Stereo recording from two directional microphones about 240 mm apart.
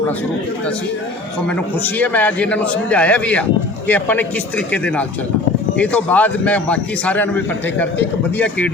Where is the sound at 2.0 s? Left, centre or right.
Centre.